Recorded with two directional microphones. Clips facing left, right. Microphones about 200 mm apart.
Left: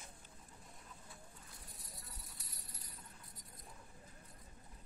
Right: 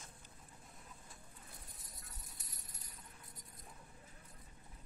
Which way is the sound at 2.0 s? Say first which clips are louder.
Left 1 dB; 50° right (ahead or behind).